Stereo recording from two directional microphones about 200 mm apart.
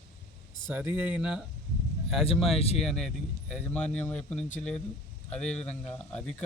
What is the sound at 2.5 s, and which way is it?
Speech, 30° left (ahead or behind).